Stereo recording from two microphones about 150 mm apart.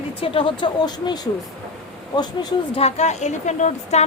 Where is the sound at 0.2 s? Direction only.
35° left (ahead or behind).